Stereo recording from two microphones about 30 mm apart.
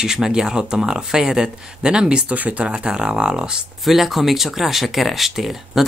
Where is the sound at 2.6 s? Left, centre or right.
Right.